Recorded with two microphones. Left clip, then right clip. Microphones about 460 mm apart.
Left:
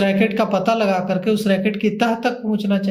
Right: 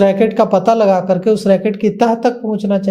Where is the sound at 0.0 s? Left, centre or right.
Right.